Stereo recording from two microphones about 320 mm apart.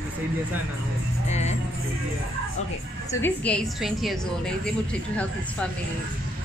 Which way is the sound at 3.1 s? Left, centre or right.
Centre.